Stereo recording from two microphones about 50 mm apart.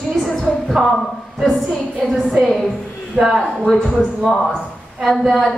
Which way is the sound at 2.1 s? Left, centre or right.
Centre.